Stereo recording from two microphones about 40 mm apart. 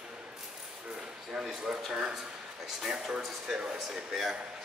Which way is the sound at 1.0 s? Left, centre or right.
Centre.